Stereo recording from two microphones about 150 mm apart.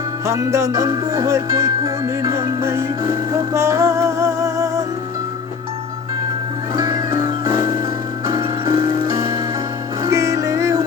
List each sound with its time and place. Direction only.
0.3 s music: 20° right (ahead or behind)
6.7 s music: 25° right (ahead or behind)
8.4 s music: 35° right (ahead or behind)
8.9 s music: 20° right (ahead or behind)